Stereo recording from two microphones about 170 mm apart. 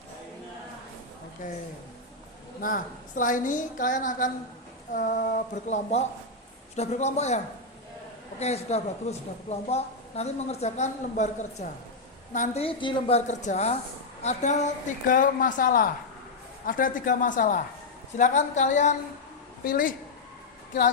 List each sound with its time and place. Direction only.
1.4 s a woman's voice: 50° left (ahead or behind)
12.6 s a woman's voice: 30° left (ahead or behind)
19.6 s a woman's voice: 55° left (ahead or behind)